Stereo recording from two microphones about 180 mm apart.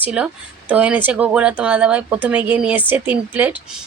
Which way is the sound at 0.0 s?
5° right (ahead or behind).